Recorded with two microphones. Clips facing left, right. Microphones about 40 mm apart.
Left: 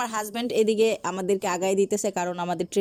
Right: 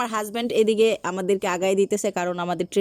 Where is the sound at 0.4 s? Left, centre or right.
Right.